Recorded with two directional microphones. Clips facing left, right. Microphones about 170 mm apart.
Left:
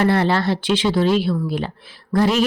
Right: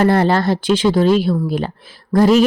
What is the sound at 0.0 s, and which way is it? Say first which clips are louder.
A woman's voice: right 3 dB; 45° right (ahead or behind).